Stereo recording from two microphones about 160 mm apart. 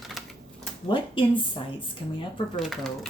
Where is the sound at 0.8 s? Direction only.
30° left (ahead or behind).